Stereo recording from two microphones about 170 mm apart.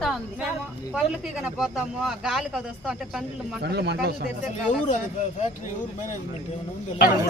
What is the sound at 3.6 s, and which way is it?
Speech, 75° right (ahead or behind).